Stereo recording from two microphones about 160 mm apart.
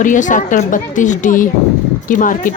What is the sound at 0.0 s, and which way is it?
A woman's voice, 55° left (ahead or behind).